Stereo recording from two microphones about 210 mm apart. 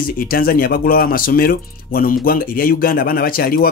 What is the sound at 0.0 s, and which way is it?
Speech, 45° left (ahead or behind).